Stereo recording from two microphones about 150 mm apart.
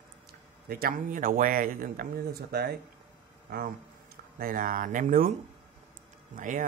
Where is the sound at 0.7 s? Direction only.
80° right.